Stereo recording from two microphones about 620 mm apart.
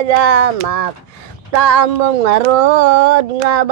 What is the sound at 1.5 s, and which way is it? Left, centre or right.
Speech, right.